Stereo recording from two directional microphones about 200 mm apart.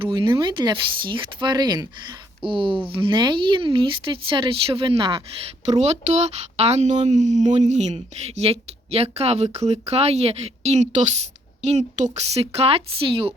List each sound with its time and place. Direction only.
0.0 s speech: 25° right (ahead or behind)
5.6 s speech: 35° right (ahead or behind)